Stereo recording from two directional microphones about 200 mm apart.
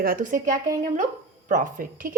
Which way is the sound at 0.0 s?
45° right (ahead or behind).